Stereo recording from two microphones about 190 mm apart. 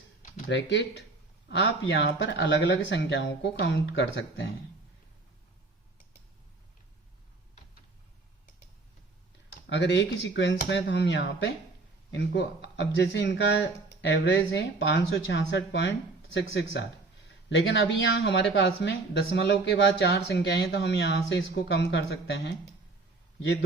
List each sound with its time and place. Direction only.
0.4 s speech: 65° left (ahead or behind)
9.6 s speech: 70° left (ahead or behind)